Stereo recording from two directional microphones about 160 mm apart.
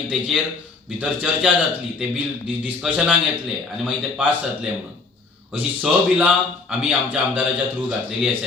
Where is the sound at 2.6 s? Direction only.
10° right (ahead or behind).